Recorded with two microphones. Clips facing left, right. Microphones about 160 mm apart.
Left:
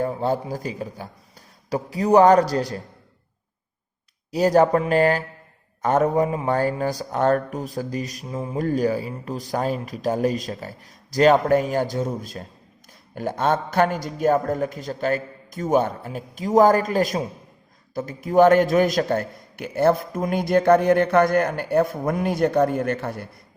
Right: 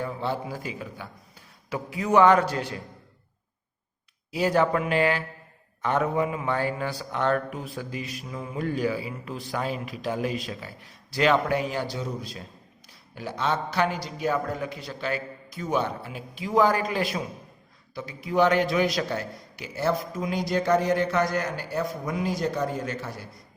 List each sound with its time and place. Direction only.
0.0 s speech: 45° left (ahead or behind)
4.3 s a man's voice: 40° left (ahead or behind); by 23.4 s 60° left (ahead or behind)